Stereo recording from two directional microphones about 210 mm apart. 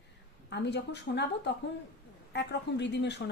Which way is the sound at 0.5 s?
55° left (ahead or behind).